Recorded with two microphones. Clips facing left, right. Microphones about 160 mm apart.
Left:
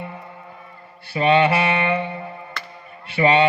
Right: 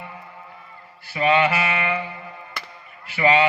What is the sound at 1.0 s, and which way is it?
Mantra, 30° left (ahead or behind).